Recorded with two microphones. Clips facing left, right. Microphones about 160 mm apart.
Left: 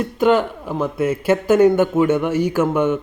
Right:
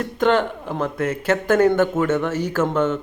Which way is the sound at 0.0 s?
10° left (ahead or behind).